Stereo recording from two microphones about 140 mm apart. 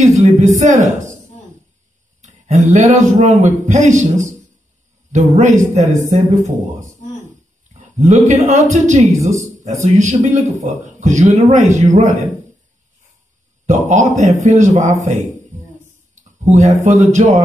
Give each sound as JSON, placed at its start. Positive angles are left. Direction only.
{"t": 0.0, "sound": "a man's voice", "side_deg": -60}
{"t": 2.2, "sound": "a man's voice", "side_deg": -60}
{"t": 9.1, "sound": "a woman's voice", "side_deg": -20}
{"t": 9.6, "sound": "a man's voice", "side_deg": -60}
{"t": 13.7, "sound": "a man's voice", "side_deg": -60}
{"t": 16.4, "sound": "a man's voice", "side_deg": -60}